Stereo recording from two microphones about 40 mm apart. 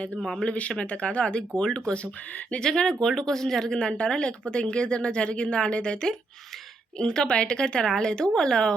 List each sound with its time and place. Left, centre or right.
0.2 s speech: centre
0.4 s speech: left
7.0 s speech: centre